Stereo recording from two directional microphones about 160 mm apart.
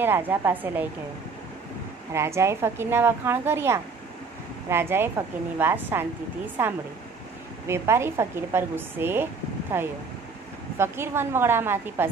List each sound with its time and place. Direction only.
0.0 s speech: 15° right (ahead or behind)
2.1 s speech: 15° right (ahead or behind)